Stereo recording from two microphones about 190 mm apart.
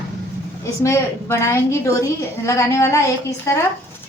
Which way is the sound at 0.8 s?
15° left (ahead or behind).